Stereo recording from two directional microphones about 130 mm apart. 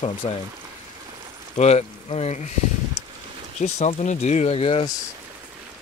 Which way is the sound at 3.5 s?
60° left (ahead or behind).